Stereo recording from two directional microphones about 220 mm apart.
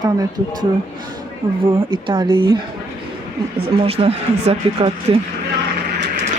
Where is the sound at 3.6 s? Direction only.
25° right (ahead or behind).